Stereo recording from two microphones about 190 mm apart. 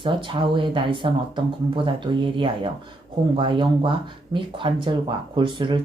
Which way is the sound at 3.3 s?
25° right (ahead or behind).